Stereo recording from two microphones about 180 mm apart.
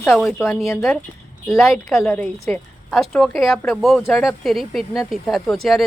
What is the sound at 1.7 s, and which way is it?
Speech, centre (ahead or behind).